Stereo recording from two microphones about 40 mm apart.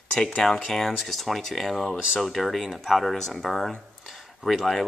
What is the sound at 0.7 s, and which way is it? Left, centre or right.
Speech, centre.